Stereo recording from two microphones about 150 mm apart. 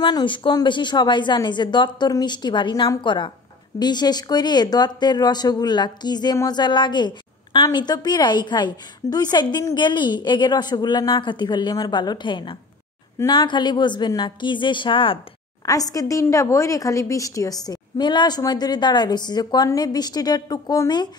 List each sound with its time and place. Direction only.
0.0 s a woman's voice: 30° left (ahead or behind)
15.6 s speech: 25° left (ahead or behind)